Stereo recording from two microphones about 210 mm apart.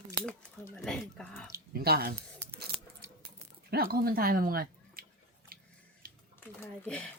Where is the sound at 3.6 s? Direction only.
45° right (ahead or behind).